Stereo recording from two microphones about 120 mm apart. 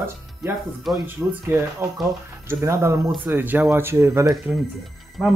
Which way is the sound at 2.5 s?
25° right (ahead or behind).